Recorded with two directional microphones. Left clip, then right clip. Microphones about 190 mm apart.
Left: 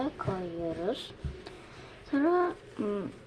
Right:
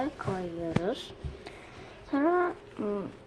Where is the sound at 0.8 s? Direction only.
Centre (ahead or behind).